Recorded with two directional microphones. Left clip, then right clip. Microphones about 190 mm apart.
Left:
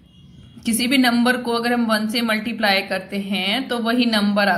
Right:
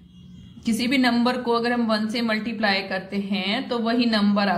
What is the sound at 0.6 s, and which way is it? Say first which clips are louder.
A woman's voice: left 4 dB; 15° left (ahead or behind).